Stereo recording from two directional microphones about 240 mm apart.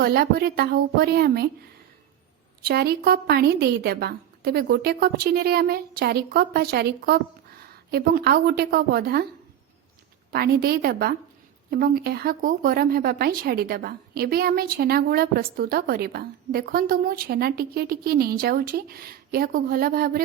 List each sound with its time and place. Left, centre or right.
0.0 s speech: right
2.6 s speech: right
10.3 s speech: right